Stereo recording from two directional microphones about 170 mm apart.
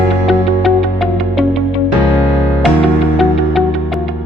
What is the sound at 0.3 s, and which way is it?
Music, centre (ahead or behind).